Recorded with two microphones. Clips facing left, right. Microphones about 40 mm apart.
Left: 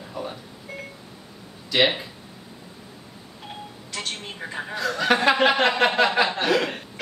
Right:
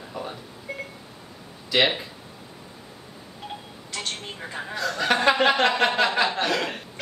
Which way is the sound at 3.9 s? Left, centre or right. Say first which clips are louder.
Even; centre.